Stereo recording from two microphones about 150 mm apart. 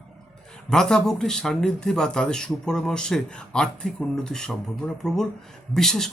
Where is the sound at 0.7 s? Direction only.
5° left (ahead or behind).